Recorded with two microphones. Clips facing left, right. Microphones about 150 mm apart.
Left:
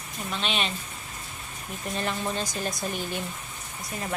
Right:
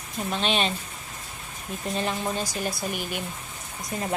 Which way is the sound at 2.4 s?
10° right (ahead or behind).